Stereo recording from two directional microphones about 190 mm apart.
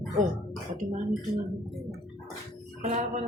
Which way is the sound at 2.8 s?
40° right (ahead or behind).